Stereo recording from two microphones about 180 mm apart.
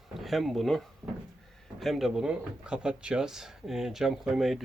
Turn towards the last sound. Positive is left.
turn(degrees=0)  # may be behind; listen again after turning